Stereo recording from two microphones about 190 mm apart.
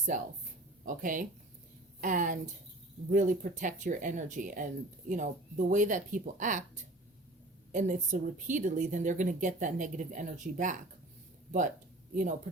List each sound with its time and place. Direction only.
0.1 s a woman's voice: 40° right (ahead or behind)
12.1 s speech: 40° right (ahead or behind)